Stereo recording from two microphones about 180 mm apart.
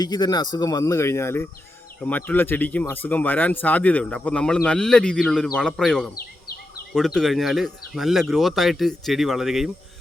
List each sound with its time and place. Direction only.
0.0 s speech: 20° left (ahead or behind); by 9.6 s centre (ahead or behind)